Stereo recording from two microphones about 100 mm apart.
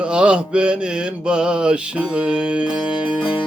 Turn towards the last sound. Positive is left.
turn(degrees=-10)  # may be behind; listen again after turning